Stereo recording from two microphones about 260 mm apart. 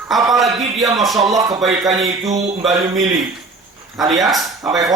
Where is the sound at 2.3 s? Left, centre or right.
Right.